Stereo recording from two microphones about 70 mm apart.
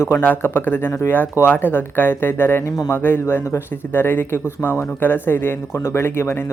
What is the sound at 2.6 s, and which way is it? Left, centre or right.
Speech, left.